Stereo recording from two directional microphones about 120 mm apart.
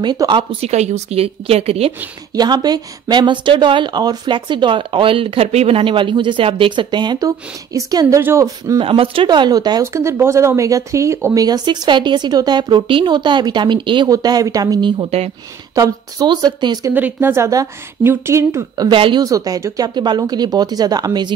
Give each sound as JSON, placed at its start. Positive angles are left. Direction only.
{"t": 0.3, "sound": "speech", "side_deg": -45}
{"t": 0.7, "sound": "a woman's voice", "side_deg": -70}
{"t": 2.3, "sound": "speech", "side_deg": -35}
{"t": 8.7, "sound": "speech", "side_deg": -50}
{"t": 11.4, "sound": "speech", "side_deg": -35}
{"t": 14.1, "sound": "speech", "side_deg": -30}
{"t": 15.0, "sound": "a woman's voice", "side_deg": -60}
{"t": 15.7, "sound": "speech", "side_deg": -30}
{"t": 16.9, "sound": "speech", "side_deg": -15}
{"t": 18.9, "sound": "speech", "side_deg": -40}
{"t": 19.2, "sound": "speech", "side_deg": -30}